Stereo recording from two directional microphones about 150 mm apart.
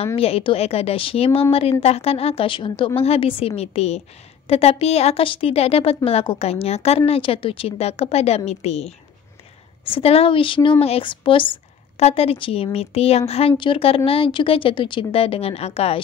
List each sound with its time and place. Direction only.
0.0 s a woman's voice: 40° left (ahead or behind)